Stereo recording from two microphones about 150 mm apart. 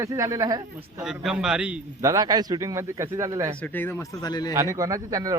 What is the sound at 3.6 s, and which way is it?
Speech, 15° left (ahead or behind).